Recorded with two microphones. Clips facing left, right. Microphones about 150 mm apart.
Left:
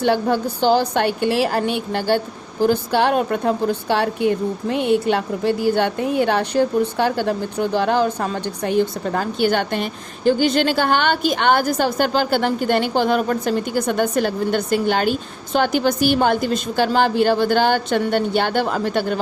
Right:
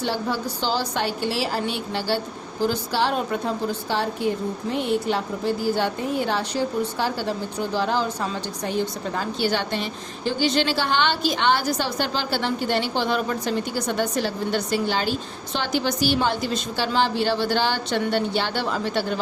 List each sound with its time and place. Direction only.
0.0 s a woman's voice: 55° left (ahead or behind)